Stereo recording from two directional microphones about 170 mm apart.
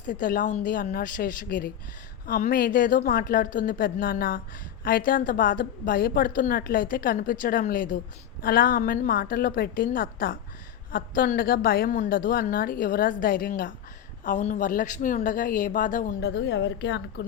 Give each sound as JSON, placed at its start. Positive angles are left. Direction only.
{"t": 0.0, "sound": "a woman's voice", "side_deg": 50}
{"t": 16.2, "sound": "a woman's voice", "side_deg": 90}